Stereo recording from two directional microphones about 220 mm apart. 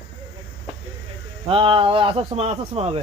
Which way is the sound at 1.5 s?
25° right (ahead or behind).